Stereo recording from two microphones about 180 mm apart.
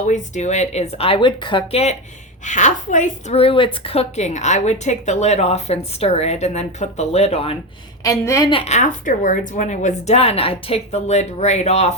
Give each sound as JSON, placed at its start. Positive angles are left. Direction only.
{"t": 0.0, "sound": "a woman's voice", "side_deg": 40}
{"t": 8.0, "sound": "a woman's voice", "side_deg": 20}